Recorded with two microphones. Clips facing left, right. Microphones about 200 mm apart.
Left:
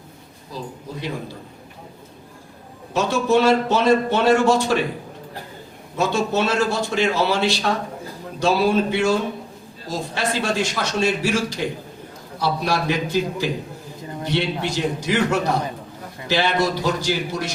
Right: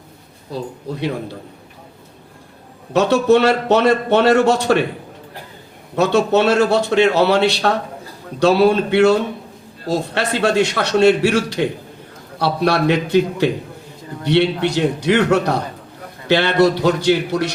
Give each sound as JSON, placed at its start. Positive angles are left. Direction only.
{"t": 0.5, "sound": "a man's voice", "side_deg": -65}
{"t": 2.9, "sound": "a man's voice", "side_deg": -65}
{"t": 6.0, "sound": "a man's voice", "side_deg": -65}